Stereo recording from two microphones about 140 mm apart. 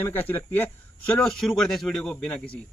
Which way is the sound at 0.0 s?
15° left (ahead or behind).